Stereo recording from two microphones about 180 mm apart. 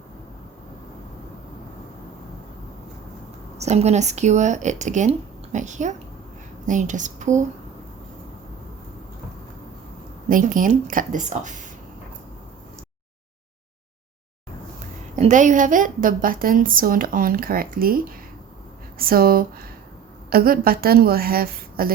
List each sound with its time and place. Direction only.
3.6 s a woman's voice: 35° right (ahead or behind)
10.2 s a woman's voice: 50° right (ahead or behind)
15.1 s a woman's voice: 45° right (ahead or behind)